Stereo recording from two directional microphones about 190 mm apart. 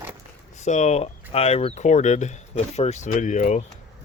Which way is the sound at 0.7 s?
40° left (ahead or behind).